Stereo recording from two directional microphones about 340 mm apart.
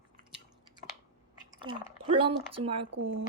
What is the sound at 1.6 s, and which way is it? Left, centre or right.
Speech, centre.